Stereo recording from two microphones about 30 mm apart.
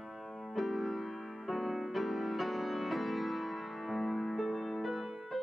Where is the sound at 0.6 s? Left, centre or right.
Centre.